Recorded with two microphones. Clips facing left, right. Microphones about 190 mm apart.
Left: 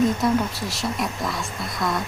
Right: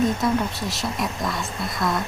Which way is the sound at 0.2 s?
Centre (ahead or behind).